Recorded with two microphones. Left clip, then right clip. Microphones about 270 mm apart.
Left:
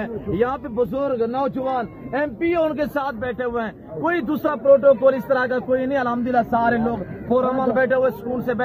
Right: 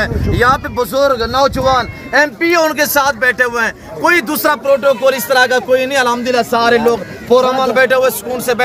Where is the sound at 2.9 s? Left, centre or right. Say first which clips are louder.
Right 13 dB; right.